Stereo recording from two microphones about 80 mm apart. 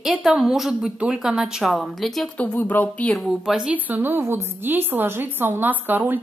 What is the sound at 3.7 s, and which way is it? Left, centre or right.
A woman's voice, right.